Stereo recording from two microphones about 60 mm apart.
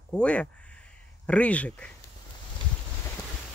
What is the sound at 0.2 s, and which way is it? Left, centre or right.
Speech, centre.